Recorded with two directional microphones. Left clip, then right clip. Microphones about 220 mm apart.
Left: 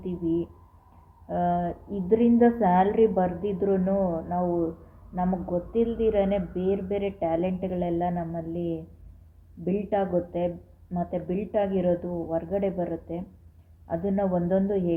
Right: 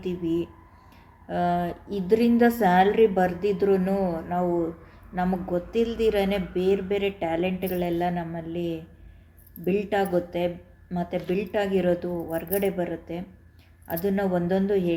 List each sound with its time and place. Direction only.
0.0 s a woman's voice: 15° right (ahead or behind)